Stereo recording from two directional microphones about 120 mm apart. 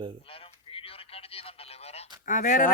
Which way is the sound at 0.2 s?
50° left (ahead or behind).